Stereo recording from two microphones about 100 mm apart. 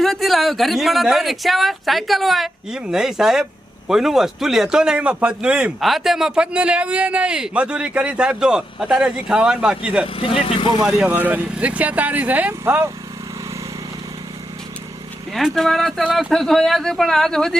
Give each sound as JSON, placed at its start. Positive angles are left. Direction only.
{"t": 0.0, "sound": "speech", "side_deg": 0}
{"t": 10.2, "sound": "speech", "side_deg": 60}
{"t": 10.8, "sound": "speech", "side_deg": -15}
{"t": 15.3, "sound": "speech", "side_deg": 0}